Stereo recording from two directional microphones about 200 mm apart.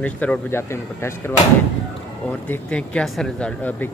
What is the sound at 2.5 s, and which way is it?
A man's voice, 5° left (ahead or behind).